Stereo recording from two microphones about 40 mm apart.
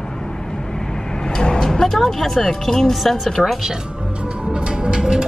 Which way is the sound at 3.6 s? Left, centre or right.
Centre.